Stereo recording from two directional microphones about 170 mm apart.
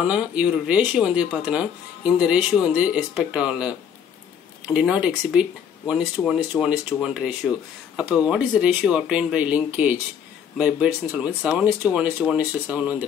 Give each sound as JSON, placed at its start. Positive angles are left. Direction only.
{"t": 0.0, "sound": "speech", "side_deg": -5}
{"t": 4.7, "sound": "speech", "side_deg": -5}